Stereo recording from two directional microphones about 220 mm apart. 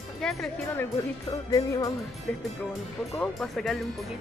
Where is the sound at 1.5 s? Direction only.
15° left (ahead or behind).